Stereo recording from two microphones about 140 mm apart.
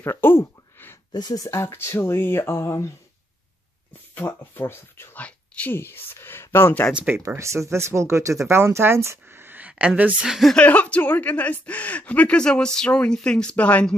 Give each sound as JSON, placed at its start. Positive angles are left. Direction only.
{"t": 0.0, "sound": "a sound", "side_deg": 15}
{"t": 1.1, "sound": "speech", "side_deg": 25}
{"t": 4.1, "sound": "speech", "side_deg": 15}
{"t": 6.9, "sound": "speech", "side_deg": -10}
{"t": 7.2, "sound": "speech", "side_deg": -20}